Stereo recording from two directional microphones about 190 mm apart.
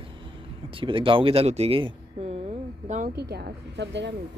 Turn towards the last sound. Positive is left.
turn(degrees=-65)  # may be behind; listen again after turning